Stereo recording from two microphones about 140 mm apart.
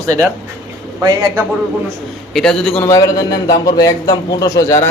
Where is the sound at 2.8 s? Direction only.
25° left (ahead or behind).